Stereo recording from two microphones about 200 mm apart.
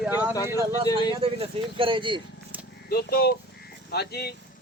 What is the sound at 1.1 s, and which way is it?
Speech, 25° right (ahead or behind).